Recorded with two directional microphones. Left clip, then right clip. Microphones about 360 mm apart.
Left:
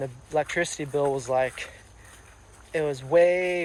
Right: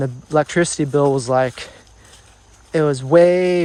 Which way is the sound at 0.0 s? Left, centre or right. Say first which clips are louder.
Right 9 dB; right.